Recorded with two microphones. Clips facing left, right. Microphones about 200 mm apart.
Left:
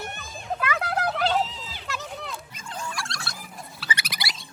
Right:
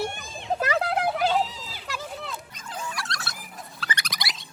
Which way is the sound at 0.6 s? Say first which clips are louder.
Right 3 dB; 40° right (ahead or behind).